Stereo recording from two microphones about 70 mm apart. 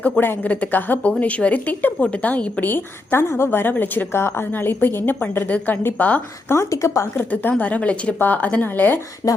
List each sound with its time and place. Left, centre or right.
0.0 s speech: left
6.5 s speech: left
7.2 s speech: left
9.2 s speech: left